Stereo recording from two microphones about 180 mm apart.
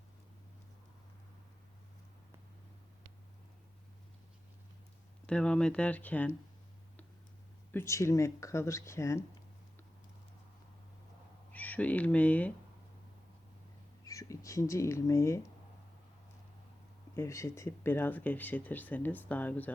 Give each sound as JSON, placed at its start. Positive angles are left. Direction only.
{"t": 5.2, "sound": "speech", "side_deg": 5}
{"t": 7.7, "sound": "speech", "side_deg": 15}
{"t": 11.5, "sound": "speech", "side_deg": 10}
{"t": 14.1, "sound": "speech", "side_deg": 15}
{"t": 17.2, "sound": "speech", "side_deg": 15}